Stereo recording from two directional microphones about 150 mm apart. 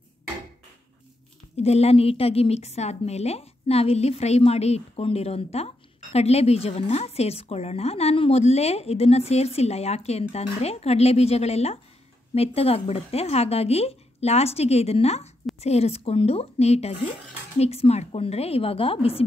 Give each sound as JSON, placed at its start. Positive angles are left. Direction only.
{"t": 1.6, "sound": "a woman's voice", "side_deg": 45}